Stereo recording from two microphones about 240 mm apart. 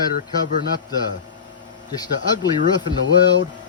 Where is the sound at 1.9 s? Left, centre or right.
Centre.